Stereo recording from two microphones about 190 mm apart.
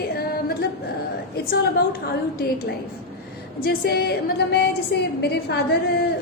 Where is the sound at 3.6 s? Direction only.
55° left (ahead or behind).